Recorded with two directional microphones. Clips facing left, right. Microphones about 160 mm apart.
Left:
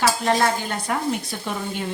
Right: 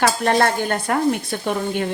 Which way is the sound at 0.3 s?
60° right (ahead or behind).